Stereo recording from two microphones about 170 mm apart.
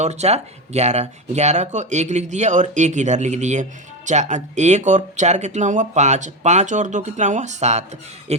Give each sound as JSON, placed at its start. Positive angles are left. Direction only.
{"t": 0.0, "sound": "speech", "side_deg": -40}